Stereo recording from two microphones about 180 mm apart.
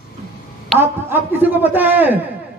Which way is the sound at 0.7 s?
10° right (ahead or behind).